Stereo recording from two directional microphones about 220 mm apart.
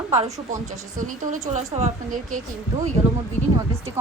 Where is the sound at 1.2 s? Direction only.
30° right (ahead or behind).